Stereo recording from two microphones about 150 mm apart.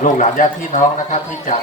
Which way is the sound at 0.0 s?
55° left (ahead or behind).